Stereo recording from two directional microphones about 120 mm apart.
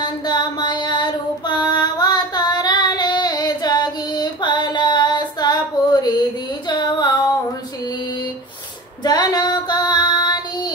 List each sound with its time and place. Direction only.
0.0 s mantra: 35° left (ahead or behind)
6.7 s female singing: 40° left (ahead or behind)
9.0 s child singing: 35° left (ahead or behind)